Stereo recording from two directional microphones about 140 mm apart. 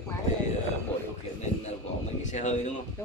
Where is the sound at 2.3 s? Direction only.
55° left (ahead or behind).